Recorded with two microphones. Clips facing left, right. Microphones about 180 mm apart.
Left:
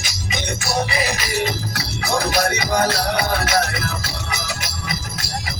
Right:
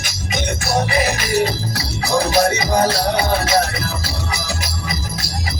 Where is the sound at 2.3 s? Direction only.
30° right (ahead or behind).